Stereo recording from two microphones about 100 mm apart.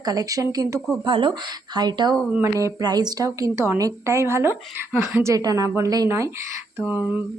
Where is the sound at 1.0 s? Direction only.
55° right (ahead or behind); by 5.7 s 35° right (ahead or behind).